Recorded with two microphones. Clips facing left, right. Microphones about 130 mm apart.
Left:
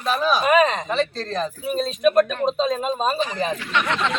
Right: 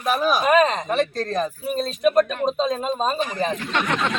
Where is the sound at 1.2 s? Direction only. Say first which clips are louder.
Right 2 dB; 15° right (ahead or behind).